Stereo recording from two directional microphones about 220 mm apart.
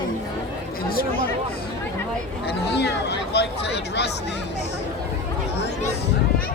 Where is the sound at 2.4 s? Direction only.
50° left (ahead or behind).